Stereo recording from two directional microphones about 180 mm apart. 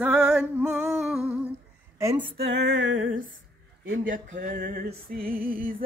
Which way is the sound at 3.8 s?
90° right.